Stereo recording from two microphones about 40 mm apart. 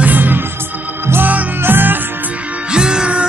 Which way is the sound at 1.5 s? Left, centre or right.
Right.